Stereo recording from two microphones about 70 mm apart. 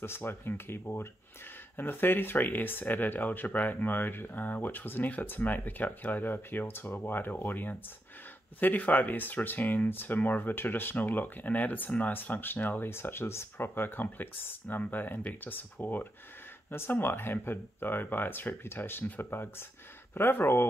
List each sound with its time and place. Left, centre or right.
0.0 s speech: left